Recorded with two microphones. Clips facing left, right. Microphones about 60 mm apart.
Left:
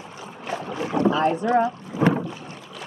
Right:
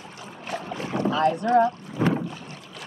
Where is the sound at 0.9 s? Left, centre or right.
Left.